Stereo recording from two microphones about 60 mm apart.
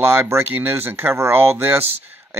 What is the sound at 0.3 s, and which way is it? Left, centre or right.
Speech, right.